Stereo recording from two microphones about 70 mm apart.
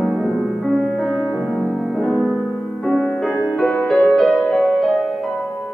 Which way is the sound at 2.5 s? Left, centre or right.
Centre.